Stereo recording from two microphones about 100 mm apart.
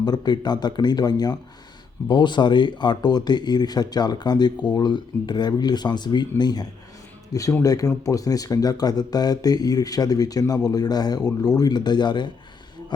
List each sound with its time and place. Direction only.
0.0 s speech: 45° left (ahead or behind)